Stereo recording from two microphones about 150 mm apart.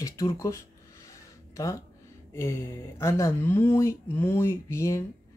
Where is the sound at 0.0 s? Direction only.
20° left (ahead or behind).